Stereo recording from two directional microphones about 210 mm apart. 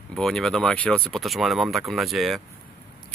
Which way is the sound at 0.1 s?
Centre (ahead or behind).